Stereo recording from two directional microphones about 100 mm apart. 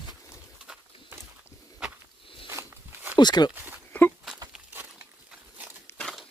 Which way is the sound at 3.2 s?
45° left (ahead or behind).